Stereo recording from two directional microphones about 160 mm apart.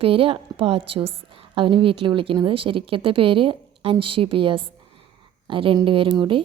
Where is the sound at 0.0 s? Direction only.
35° right (ahead or behind).